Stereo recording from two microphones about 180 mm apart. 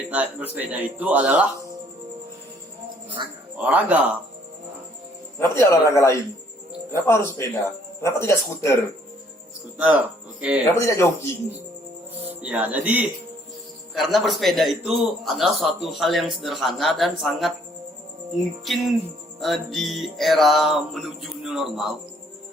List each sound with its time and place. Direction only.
0.1 s speech: 10° right (ahead or behind)
3.2 s speech: 25° right (ahead or behind)
3.6 s speech: 10° right (ahead or behind)
5.4 s a man's voice: 15° left (ahead or behind)
9.7 s speech: 5° right (ahead or behind)
10.8 s a man's voice: 15° left (ahead or behind)
12.2 s a man's voice: 10° right (ahead or behind)
18.6 s a man's voice: centre (ahead or behind)